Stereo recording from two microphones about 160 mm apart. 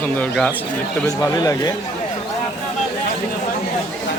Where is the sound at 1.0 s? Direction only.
20° left (ahead or behind).